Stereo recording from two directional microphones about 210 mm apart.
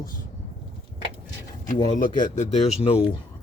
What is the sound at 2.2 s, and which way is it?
Speech, 35° left (ahead or behind).